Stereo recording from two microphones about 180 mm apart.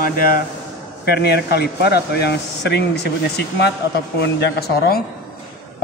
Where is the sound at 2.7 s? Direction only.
70° left (ahead or behind).